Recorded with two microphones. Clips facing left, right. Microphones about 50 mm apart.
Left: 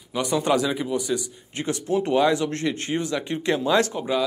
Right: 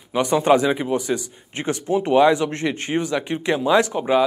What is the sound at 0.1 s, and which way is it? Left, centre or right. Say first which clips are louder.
Speech: right 5 dB; right.